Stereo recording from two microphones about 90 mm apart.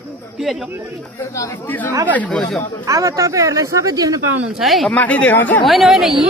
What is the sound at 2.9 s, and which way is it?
Speech, 35° right (ahead or behind).